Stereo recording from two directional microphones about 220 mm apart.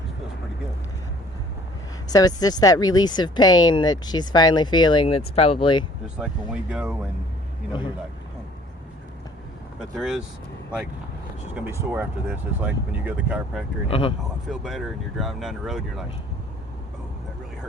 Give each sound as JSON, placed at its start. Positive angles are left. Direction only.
{"t": 2.0, "sound": "speech", "side_deg": 15}
{"t": 6.1, "sound": "speech", "side_deg": -5}
{"t": 10.0, "sound": "speech", "side_deg": 0}
{"t": 11.5, "sound": "speech", "side_deg": -10}
{"t": 13.8, "sound": "speech", "side_deg": 25}
{"t": 14.4, "sound": "speech", "side_deg": 0}